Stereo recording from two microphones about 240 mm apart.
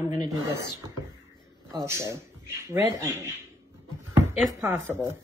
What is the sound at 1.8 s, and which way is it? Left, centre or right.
Speech, centre.